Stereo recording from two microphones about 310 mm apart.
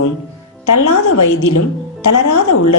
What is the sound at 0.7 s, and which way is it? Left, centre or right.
A woman's voice, left.